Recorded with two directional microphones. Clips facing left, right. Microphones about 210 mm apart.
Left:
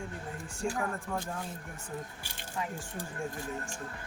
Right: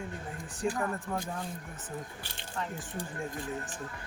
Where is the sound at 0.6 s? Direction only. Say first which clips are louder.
Right 2 dB; centre (ahead or behind).